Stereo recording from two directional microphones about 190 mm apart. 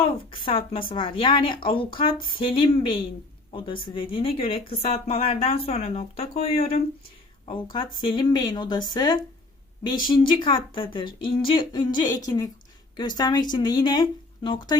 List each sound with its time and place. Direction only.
0.0 s a woman's voice: 30° left (ahead or behind)